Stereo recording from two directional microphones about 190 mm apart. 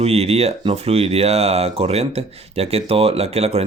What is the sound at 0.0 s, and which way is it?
Speech, 30° right (ahead or behind).